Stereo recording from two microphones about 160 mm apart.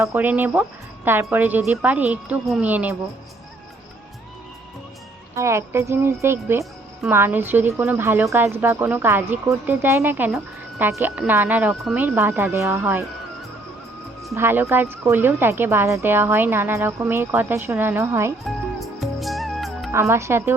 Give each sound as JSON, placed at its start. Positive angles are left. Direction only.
{"t": 0.0, "sound": "speech", "side_deg": -10}
{"t": 5.4, "sound": "speech", "side_deg": -15}
{"t": 14.3, "sound": "speech", "side_deg": -15}
{"t": 18.4, "sound": "music", "side_deg": 0}
{"t": 19.9, "sound": "speech", "side_deg": -15}